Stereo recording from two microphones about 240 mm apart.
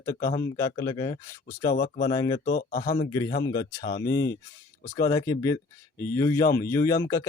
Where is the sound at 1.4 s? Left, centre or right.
Left.